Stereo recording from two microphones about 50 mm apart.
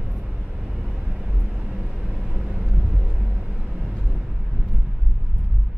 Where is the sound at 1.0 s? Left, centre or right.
Centre.